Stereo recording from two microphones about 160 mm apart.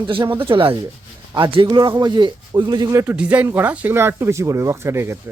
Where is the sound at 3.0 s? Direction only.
10° right (ahead or behind).